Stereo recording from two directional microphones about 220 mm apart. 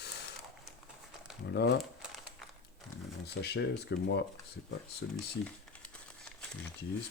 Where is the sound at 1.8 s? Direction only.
Centre (ahead or behind).